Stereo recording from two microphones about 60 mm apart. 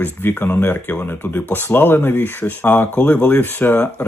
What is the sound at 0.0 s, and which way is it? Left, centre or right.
Speech, left.